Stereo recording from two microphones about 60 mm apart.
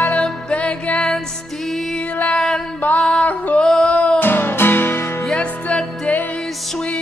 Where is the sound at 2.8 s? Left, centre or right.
Left.